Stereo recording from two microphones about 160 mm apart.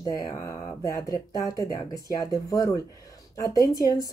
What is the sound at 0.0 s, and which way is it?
Speech, 25° left (ahead or behind).